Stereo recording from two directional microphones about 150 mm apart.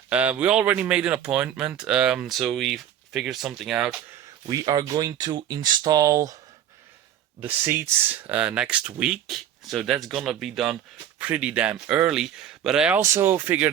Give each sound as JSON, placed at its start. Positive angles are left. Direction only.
{"t": 0.1, "sound": "speech", "side_deg": -10}
{"t": 4.4, "sound": "speech", "side_deg": -25}
{"t": 7.4, "sound": "speech", "side_deg": -15}
{"t": 13.0, "sound": "speech", "side_deg": -20}